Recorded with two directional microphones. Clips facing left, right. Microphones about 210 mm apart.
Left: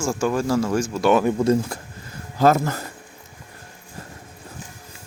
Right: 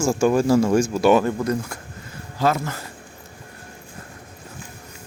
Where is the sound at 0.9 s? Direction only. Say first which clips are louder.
Left 1 dB; 5° right (ahead or behind).